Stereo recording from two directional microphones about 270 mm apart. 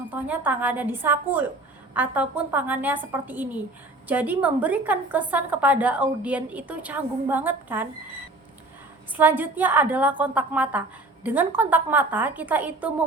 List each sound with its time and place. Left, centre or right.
0.1 s a woman's voice: centre
9.1 s a woman's voice: centre